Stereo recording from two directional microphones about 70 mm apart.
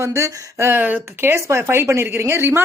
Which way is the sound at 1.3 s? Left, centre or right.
Right.